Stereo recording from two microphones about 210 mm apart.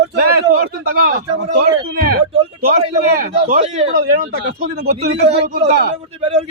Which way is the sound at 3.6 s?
30° right (ahead or behind).